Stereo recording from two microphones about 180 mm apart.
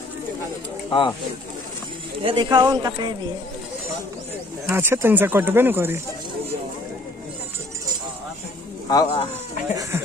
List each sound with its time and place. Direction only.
0.9 s speech: 25° left (ahead or behind)
2.2 s speech: 25° right (ahead or behind)
4.7 s speech: 10° right (ahead or behind)
8.9 s speech: 25° left (ahead or behind)